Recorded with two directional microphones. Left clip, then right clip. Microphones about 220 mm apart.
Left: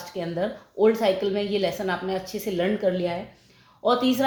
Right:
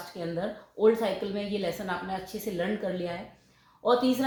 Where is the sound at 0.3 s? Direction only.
40° left (ahead or behind).